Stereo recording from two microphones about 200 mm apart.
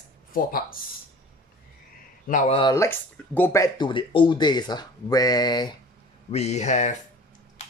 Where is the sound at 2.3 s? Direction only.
35° left (ahead or behind).